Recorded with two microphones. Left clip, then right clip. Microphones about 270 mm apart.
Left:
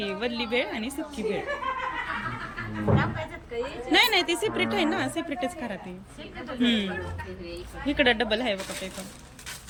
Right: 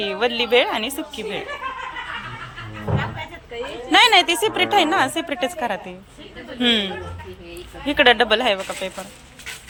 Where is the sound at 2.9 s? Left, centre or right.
Right.